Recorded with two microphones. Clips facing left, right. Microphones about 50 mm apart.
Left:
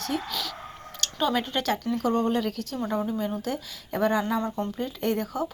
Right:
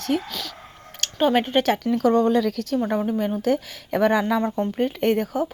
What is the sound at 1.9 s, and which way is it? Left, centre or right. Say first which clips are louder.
Speech: right 7 dB; right.